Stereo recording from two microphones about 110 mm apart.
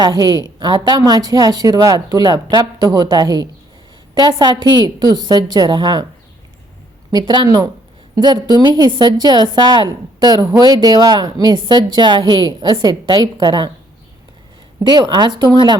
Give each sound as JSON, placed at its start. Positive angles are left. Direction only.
{"t": 0.0, "sound": "a woman's voice", "side_deg": -40}
{"t": 7.1, "sound": "a woman's voice", "side_deg": -40}
{"t": 14.8, "sound": "a woman's voice", "side_deg": -40}